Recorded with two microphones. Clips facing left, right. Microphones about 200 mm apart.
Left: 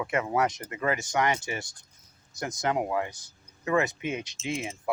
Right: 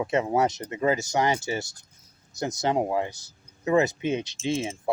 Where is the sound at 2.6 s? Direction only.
30° right (ahead or behind).